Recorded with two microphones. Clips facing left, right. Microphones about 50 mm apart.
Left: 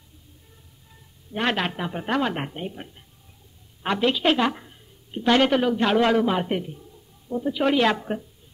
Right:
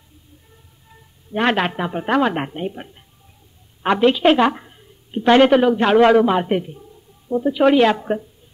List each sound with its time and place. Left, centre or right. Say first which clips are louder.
1.3 s a man's voice: right 6 dB; centre